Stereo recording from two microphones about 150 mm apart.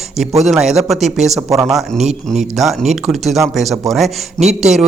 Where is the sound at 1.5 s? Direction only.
20° right (ahead or behind).